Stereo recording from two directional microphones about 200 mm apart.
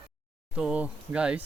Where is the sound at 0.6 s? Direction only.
5° right (ahead or behind).